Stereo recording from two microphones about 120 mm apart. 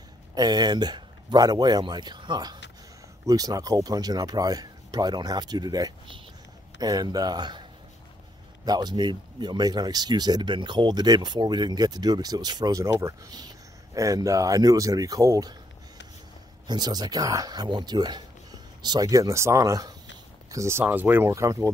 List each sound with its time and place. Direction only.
0.3 s speech: 35° right (ahead or behind)
8.6 s speech: 35° right (ahead or behind)
16.6 s speech: 35° right (ahead or behind); by 21.3 s 15° right (ahead or behind)
21.3 s speech: 25° right (ahead or behind)